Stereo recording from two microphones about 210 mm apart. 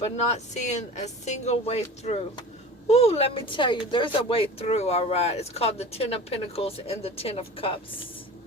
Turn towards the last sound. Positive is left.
turn(degrees=25)  # may be behind; listen again after turning